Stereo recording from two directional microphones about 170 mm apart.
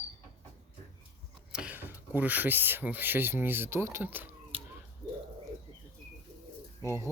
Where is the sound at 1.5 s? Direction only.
5° right (ahead or behind).